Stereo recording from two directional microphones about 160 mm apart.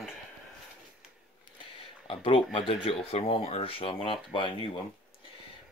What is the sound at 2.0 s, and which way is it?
Speech, 35° left (ahead or behind).